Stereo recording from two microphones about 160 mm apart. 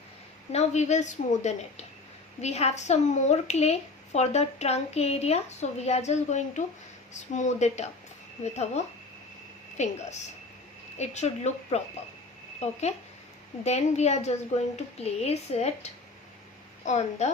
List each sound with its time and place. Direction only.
0.5 s a woman's voice: 45° left (ahead or behind)